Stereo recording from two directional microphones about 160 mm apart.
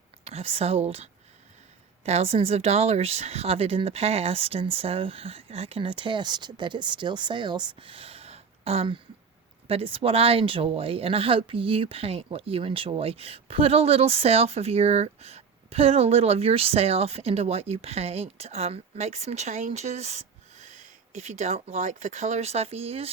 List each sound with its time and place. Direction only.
0.3 s speech: 40° right (ahead or behind)